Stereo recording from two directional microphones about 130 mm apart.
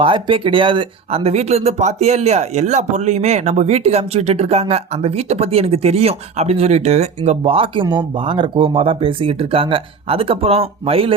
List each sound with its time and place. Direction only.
0.0 s speech: 40° right (ahead or behind)